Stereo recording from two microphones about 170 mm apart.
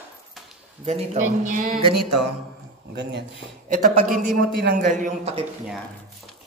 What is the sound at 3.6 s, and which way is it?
Speech, 50° right (ahead or behind).